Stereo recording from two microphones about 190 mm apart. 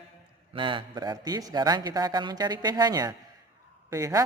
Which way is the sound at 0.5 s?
25° right (ahead or behind).